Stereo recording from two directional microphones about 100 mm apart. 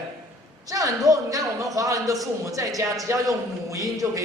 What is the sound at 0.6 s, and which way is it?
A man's voice, 35° right (ahead or behind).